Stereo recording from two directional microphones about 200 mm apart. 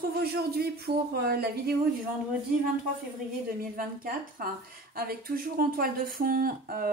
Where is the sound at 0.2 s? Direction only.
50° right (ahead or behind).